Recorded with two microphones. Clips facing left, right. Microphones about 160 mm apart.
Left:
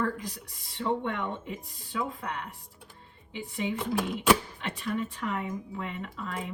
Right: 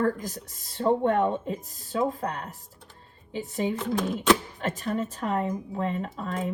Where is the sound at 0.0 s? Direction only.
45° right (ahead or behind).